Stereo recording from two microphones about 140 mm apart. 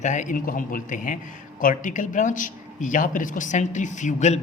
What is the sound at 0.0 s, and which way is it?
A man's voice, 60° left (ahead or behind).